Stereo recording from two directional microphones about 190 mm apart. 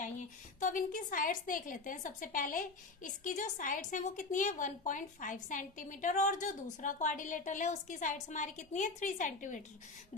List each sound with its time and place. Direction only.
0.6 s a woman's voice: 45° left (ahead or behind)